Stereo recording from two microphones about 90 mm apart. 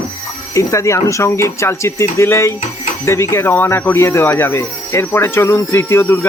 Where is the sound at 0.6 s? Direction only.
35° left (ahead or behind).